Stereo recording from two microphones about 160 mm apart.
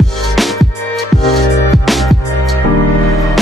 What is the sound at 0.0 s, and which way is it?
Music, centre (ahead or behind).